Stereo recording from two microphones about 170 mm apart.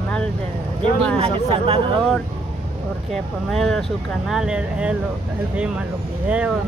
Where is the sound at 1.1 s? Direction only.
35° right (ahead or behind).